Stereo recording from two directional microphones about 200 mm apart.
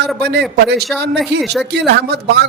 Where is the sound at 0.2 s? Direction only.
55° right (ahead or behind).